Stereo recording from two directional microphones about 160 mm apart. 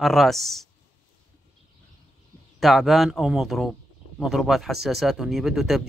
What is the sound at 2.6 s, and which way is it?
Speech, centre (ahead or behind).